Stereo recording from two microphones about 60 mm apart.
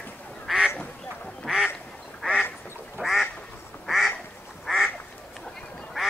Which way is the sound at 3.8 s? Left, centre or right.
Centre.